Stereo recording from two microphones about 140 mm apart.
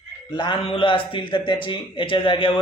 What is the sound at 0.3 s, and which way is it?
Speech, 35° left (ahead or behind).